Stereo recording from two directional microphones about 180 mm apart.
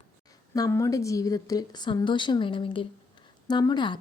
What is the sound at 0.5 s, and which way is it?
A woman's voice, 20° left (ahead or behind).